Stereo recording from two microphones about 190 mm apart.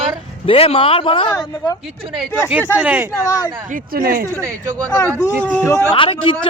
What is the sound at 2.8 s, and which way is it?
Speech, 10° right (ahead or behind).